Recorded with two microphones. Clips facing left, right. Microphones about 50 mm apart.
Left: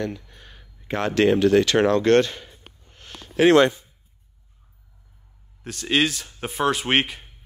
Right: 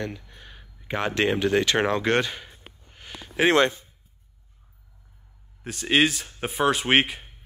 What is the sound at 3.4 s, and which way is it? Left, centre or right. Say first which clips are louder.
Speech: left 4 dB; right.